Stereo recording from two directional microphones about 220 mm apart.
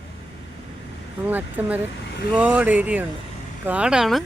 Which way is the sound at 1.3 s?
10° right (ahead or behind).